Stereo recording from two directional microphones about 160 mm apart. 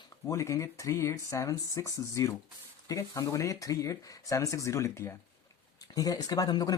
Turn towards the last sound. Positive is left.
turn(degrees=25)  # may be behind; listen again after turning